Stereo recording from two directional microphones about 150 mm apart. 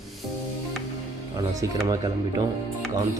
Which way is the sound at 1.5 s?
20° right (ahead or behind).